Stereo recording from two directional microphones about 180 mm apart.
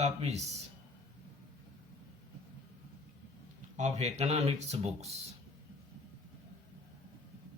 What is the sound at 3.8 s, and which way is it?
Speech, 40° right (ahead or behind).